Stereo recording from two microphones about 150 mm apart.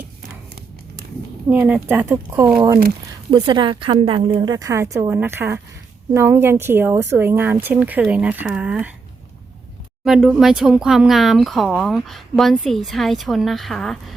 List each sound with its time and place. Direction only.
1.5 s a woman's voice: 10° right (ahead or behind)
10.0 s speech: 5° right (ahead or behind)